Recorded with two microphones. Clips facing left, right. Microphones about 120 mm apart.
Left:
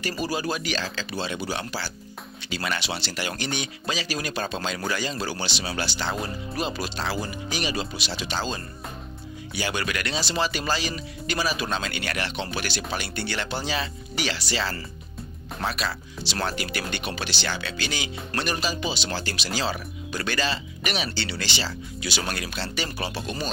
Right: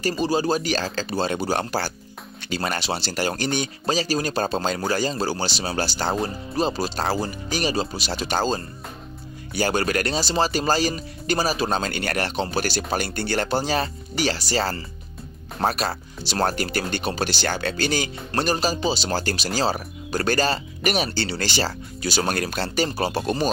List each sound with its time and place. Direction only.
0.1 s speech: 30° right (ahead or behind); by 8.5 s 45° right (ahead or behind)
9.6 s speech: 40° right (ahead or behind)